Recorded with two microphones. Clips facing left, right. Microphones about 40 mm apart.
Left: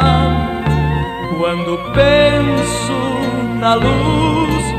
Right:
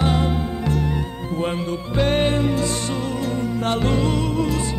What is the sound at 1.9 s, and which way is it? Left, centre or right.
Music, left.